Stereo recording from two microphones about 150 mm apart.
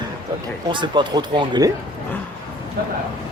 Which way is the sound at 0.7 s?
30° right (ahead or behind).